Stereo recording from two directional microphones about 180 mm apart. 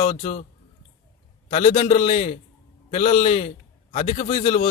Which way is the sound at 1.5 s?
35° left (ahead or behind).